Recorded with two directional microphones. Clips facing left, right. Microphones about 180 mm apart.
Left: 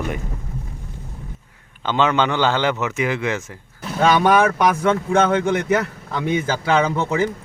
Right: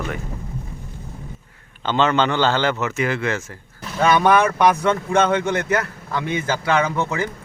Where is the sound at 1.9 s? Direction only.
10° left (ahead or behind).